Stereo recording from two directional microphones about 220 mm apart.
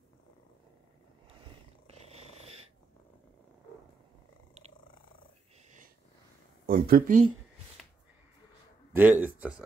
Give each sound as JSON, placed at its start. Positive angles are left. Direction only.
{"t": 1.9, "sound": "purr", "side_deg": -30}
{"t": 6.6, "sound": "speech", "side_deg": -40}
{"t": 8.9, "sound": "a man's voice", "side_deg": -10}